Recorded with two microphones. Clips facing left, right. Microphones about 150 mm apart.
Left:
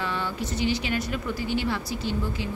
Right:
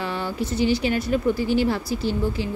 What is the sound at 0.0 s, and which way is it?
Speech, 35° right (ahead or behind).